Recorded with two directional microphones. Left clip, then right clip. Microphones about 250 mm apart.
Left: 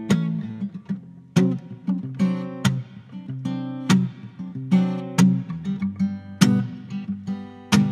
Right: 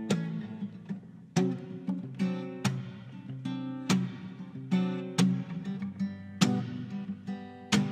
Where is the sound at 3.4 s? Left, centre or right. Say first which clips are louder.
Left 7 dB; left.